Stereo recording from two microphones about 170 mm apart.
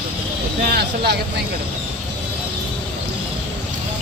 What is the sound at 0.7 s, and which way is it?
Speech, 70° right (ahead or behind).